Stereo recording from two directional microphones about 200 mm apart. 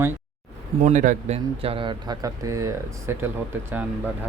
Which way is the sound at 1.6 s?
25° right (ahead or behind).